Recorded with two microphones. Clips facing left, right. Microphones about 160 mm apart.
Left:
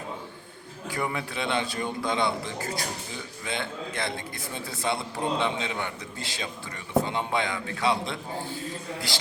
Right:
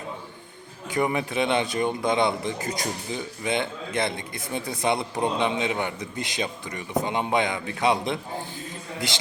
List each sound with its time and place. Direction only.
0.9 s a man's voice: 20° right (ahead or behind)